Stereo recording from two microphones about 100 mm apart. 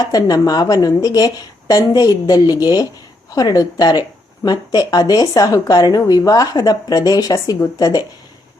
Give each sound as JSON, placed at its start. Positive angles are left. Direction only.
{"t": 0.1, "sound": "speech", "side_deg": 40}